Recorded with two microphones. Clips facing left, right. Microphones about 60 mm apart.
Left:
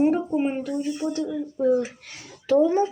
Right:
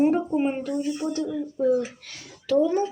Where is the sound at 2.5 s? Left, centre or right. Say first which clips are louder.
Left 2 dB; left.